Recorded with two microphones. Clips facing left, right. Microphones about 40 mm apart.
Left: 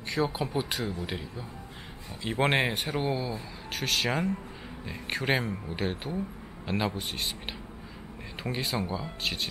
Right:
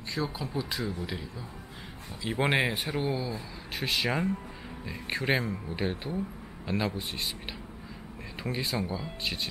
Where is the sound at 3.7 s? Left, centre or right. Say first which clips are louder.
Left 1 dB; centre.